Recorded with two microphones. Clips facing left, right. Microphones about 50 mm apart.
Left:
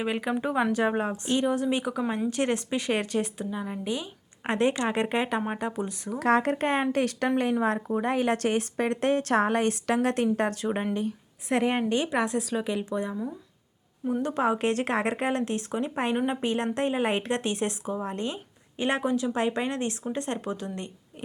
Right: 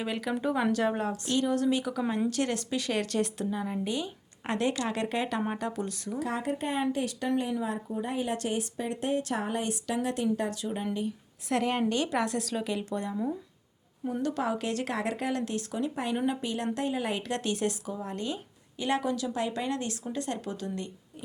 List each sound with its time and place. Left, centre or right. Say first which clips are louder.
0.0 s speech: left 3 dB; left
4.4 s speech: left 4 dB; left
6.1 s a woman's voice: left 9 dB; left
11.4 s a woman's voice: left 2 dB; left
14.1 s speech: left 4 dB; left